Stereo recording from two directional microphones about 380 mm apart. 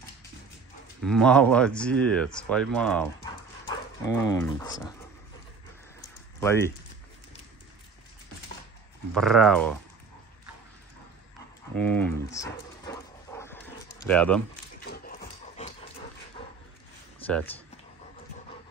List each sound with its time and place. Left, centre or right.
1.0 s speech: centre
5.9 s a sound: centre
9.1 s speech: centre
11.7 s dog: centre
13.9 s speech: centre
14.9 s rub: centre
17.3 s speech: centre